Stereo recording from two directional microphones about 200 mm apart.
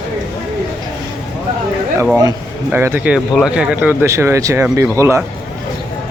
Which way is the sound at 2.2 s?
15° right (ahead or behind).